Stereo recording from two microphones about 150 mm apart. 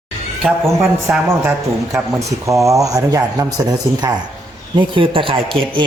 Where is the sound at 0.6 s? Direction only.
20° right (ahead or behind).